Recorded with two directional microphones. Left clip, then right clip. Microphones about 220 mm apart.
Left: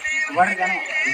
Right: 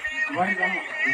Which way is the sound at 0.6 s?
45° left (ahead or behind).